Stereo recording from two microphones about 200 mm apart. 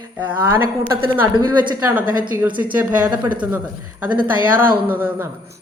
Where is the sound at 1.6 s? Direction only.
15° right (ahead or behind).